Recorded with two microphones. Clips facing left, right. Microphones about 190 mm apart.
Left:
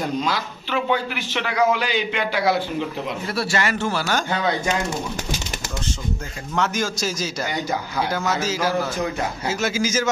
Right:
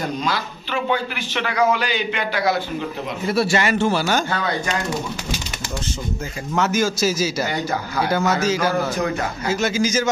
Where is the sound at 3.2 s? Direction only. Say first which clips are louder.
Right 6 dB; 20° right (ahead or behind).